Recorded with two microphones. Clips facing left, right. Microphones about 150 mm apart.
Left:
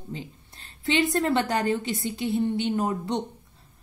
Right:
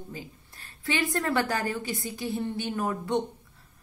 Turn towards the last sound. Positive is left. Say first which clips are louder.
# left 2 dB
turn(degrees=20)  # may be behind; listen again after turning